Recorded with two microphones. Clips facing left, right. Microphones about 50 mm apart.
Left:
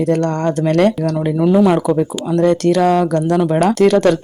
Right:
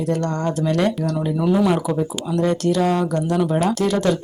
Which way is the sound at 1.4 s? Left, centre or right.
Left.